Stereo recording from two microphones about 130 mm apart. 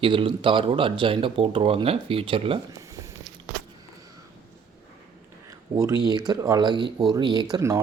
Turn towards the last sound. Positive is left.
turn(degrees=-35)  # may be behind; listen again after turning